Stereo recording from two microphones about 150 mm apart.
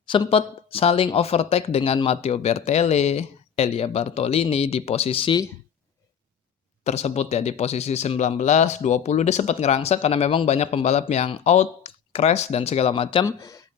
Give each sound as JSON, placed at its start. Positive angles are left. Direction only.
{"t": 0.0, "sound": "speech", "side_deg": 35}
{"t": 6.8, "sound": "speech", "side_deg": 45}
{"t": 13.2, "sound": "speech", "side_deg": 20}